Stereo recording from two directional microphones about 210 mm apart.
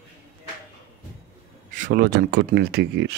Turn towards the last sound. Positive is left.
turn(degrees=-55)  # may be behind; listen again after turning